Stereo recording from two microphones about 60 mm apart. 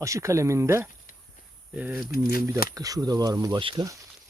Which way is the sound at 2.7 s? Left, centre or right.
Right.